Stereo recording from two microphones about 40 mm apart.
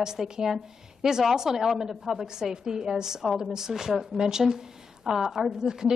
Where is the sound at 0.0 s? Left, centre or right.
Centre.